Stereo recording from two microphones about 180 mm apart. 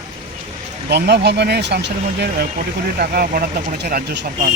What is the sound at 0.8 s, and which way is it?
Speech, 70° right (ahead or behind).